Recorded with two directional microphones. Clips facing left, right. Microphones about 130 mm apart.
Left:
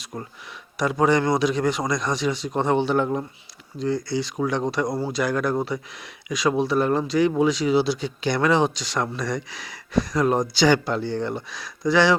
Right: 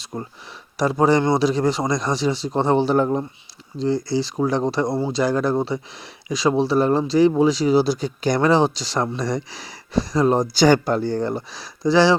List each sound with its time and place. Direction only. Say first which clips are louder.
0.0 s speech: right 3 dB; 25° right (ahead or behind)